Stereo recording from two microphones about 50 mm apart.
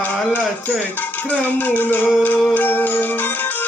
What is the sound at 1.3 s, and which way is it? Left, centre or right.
Music, left.